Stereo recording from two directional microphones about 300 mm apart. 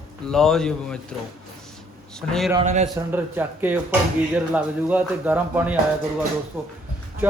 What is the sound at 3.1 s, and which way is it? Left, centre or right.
A man's voice, centre.